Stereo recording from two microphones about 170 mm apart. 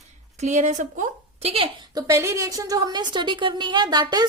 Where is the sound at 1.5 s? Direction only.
30° right (ahead or behind).